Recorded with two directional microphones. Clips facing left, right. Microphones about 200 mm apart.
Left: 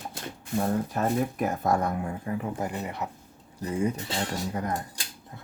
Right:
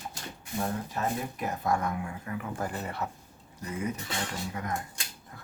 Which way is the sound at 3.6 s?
30° left (ahead or behind).